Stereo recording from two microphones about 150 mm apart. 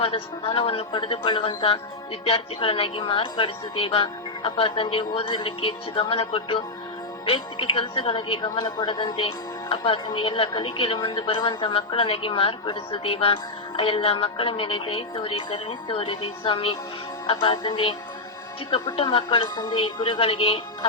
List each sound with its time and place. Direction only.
0.0 s speech: 35° left (ahead or behind)